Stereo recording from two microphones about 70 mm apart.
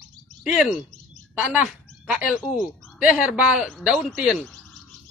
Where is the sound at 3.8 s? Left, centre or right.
Centre.